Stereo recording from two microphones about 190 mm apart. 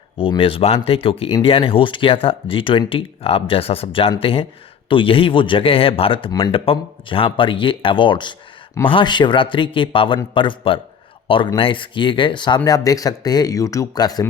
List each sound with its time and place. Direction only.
0.2 s speech: 30° left (ahead or behind)